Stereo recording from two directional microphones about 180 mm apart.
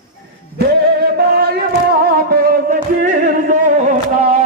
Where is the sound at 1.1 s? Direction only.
60° right (ahead or behind).